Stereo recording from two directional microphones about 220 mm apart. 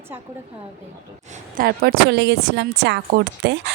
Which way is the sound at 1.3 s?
40° right (ahead or behind).